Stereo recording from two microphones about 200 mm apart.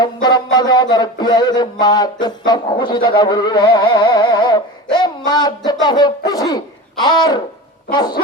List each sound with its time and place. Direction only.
0.0 s music: 20° left (ahead or behind)